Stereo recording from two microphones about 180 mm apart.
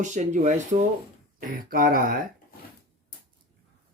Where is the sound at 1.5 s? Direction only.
55° right (ahead or behind).